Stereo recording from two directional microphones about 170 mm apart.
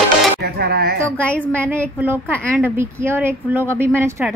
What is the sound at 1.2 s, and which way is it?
Speech, 5° left (ahead or behind).